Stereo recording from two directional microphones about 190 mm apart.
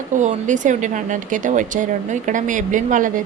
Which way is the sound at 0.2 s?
40° right (ahead or behind).